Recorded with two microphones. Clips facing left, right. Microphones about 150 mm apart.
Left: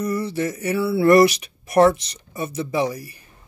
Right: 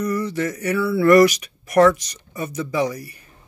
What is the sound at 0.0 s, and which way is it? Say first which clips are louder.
Speech: right 1 dB; 25° left (ahead or behind).